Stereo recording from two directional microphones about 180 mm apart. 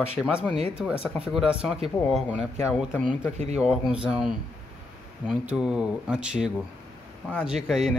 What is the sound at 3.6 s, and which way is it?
Speech, 5° right (ahead or behind).